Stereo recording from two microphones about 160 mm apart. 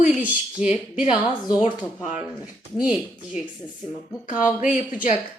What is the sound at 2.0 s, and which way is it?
Speech, 5° right (ahead or behind).